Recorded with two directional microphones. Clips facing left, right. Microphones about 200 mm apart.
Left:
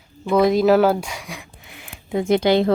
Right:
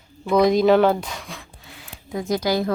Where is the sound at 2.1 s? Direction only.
25° left (ahead or behind).